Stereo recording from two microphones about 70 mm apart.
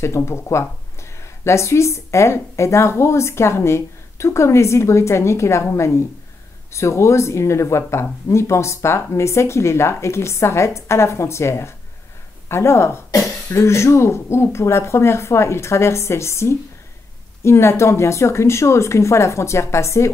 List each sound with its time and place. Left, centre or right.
0.0 s a woman's voice: left